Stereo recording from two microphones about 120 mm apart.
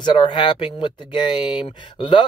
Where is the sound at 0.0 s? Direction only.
40° left (ahead or behind).